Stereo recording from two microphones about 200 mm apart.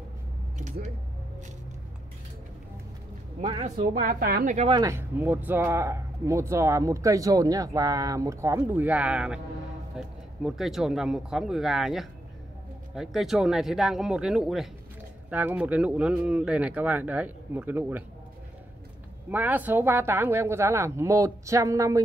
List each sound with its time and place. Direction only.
0.6 s speech: 40° right (ahead or behind)
3.3 s speech: 30° right (ahead or behind); by 4.6 s 50° right (ahead or behind)
4.6 s speech: 25° right (ahead or behind)
19.3 s speech: 10° right (ahead or behind)